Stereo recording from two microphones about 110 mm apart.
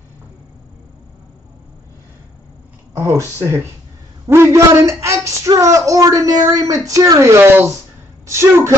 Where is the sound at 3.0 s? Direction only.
25° right (ahead or behind).